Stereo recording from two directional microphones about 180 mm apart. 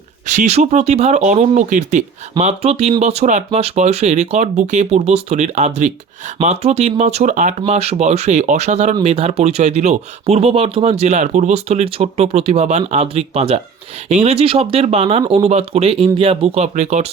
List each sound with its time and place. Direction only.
0.3 s speech: 40° right (ahead or behind)